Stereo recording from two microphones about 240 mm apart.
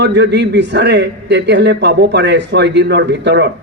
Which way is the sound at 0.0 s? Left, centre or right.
Right.